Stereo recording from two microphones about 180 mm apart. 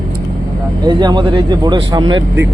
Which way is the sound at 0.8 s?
25° right (ahead or behind).